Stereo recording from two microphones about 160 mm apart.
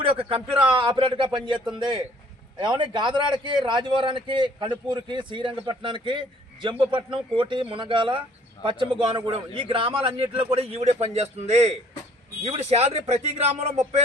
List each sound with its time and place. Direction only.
0.0 s a man's voice: 35° right (ahead or behind)